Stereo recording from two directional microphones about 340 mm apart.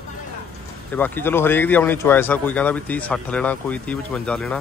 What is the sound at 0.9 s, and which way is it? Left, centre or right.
Speech, centre.